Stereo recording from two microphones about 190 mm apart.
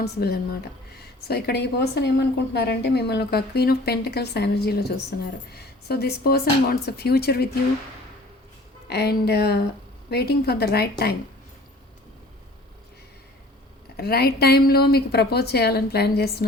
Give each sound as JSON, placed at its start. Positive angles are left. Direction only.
{"t": 0.0, "sound": "a woman's voice", "side_deg": 60}
{"t": 8.9, "sound": "a woman's voice", "side_deg": 60}
{"t": 13.9, "sound": "a woman's voice", "side_deg": 55}